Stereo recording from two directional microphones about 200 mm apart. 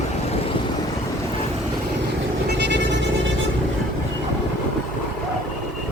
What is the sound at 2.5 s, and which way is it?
Music, 60° right (ahead or behind).